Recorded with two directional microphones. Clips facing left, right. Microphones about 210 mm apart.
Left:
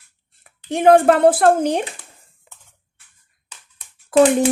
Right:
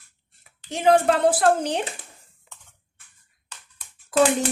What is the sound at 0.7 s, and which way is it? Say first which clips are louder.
A woman's voice: left 6 dB; 55° left (ahead or behind).